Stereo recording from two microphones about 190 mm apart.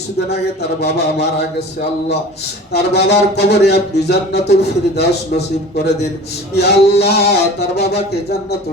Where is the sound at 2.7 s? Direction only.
60° left (ahead or behind).